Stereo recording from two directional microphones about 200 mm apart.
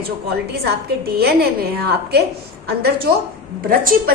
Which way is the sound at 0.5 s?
55° right (ahead or behind).